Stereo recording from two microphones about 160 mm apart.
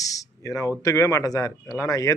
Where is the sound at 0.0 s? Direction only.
20° left (ahead or behind).